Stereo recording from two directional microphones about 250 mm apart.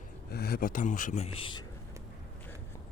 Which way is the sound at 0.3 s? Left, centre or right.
Left.